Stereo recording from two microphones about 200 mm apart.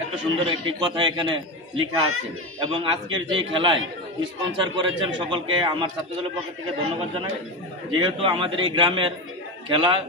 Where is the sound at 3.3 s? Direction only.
25° right (ahead or behind).